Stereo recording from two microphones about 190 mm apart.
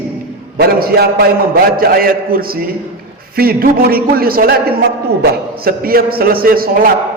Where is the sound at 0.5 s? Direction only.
55° right (ahead or behind).